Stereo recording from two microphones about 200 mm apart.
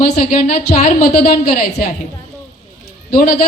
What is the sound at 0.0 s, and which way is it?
A woman's voice, 45° left (ahead or behind).